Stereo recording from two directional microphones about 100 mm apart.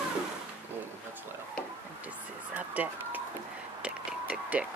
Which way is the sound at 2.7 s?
15° right (ahead or behind).